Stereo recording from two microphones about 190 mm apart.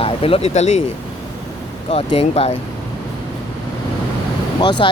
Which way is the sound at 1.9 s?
30° left (ahead or behind).